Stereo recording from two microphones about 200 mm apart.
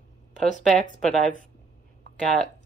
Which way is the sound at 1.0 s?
Centre (ahead or behind).